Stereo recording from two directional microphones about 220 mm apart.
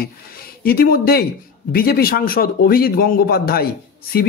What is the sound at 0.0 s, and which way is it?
A man's voice, 45° left (ahead or behind).